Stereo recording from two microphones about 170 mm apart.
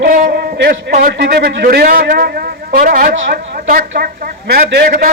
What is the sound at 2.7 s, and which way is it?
A woman's voice, 60° right (ahead or behind).